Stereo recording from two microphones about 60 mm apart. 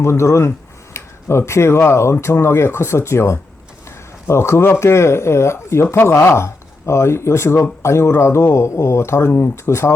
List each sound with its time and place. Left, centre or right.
0.0 s speech: left